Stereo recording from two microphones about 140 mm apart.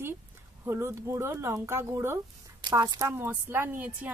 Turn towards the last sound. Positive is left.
turn(degrees=-10)  # may be behind; listen again after turning